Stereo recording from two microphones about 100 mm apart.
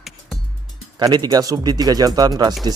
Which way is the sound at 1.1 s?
40° right (ahead or behind).